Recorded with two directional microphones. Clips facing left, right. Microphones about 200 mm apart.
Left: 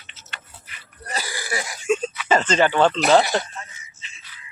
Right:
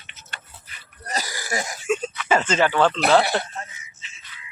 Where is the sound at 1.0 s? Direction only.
40° right (ahead or behind).